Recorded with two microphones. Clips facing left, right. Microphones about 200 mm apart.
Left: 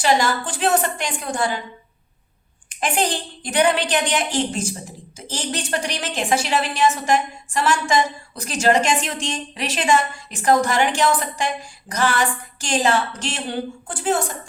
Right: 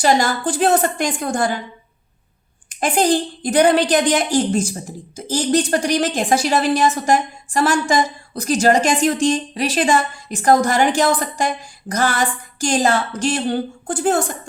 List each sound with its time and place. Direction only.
0.0 s a woman's voice: 40° right (ahead or behind)
2.6 s a woman's voice: 40° right (ahead or behind)